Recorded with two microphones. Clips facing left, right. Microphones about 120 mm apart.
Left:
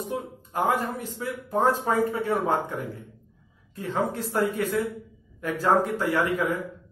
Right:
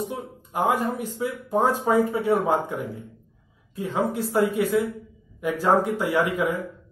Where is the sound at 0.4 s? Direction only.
15° right (ahead or behind).